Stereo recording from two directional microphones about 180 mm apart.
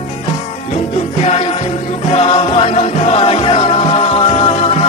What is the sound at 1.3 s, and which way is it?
Music, 35° left (ahead or behind).